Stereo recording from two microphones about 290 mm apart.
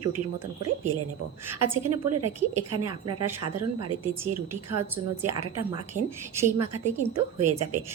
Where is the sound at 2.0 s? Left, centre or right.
Right.